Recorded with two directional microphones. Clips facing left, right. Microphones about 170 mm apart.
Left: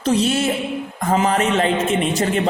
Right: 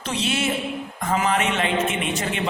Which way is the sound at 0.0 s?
40° left (ahead or behind).